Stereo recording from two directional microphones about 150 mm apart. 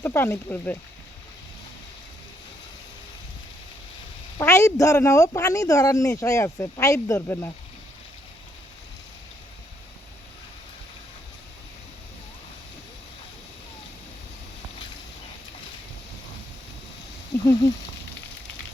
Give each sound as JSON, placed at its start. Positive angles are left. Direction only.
{"t": 0.0, "sound": "speech", "side_deg": 15}
{"t": 4.4, "sound": "a woman's voice", "side_deg": 20}
{"t": 17.4, "sound": "speech", "side_deg": 25}